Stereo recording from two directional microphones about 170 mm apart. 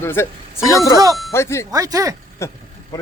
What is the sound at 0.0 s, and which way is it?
Speech, 15° left (ahead or behind).